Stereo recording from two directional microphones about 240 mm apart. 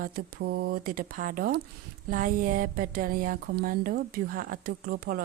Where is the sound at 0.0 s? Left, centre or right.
Right.